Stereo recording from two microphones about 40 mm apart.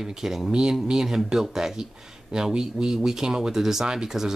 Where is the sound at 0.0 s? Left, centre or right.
Centre.